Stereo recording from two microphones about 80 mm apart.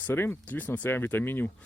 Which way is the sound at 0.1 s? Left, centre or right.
Left.